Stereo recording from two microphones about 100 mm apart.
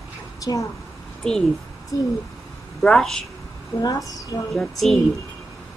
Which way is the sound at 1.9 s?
35° left (ahead or behind).